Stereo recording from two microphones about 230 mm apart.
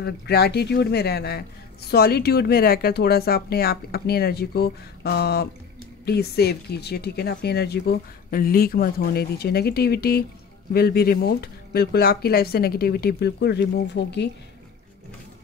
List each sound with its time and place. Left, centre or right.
0.0 s speech: left